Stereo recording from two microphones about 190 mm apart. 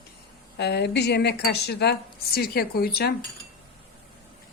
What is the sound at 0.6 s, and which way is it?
Speech, 60° left (ahead or behind).